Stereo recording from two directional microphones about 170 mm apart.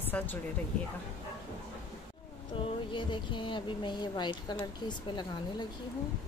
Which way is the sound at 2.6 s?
30° left (ahead or behind).